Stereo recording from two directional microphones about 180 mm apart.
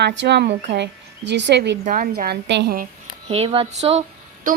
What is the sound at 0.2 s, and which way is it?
A woman's voice, 70° right (ahead or behind).